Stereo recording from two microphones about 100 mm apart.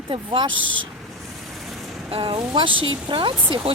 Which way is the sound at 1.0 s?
Centre (ahead or behind).